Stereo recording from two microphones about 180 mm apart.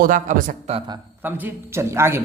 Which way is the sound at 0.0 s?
50° right (ahead or behind).